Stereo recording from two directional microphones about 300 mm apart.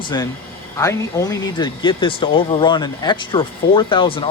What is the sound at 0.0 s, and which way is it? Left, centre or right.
Speech, centre.